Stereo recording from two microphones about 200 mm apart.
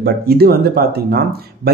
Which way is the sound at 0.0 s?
50° right (ahead or behind).